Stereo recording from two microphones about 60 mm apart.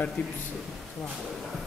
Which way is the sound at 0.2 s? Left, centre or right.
Left.